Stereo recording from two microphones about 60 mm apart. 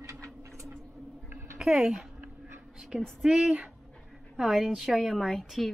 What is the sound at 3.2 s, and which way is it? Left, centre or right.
Speech, centre.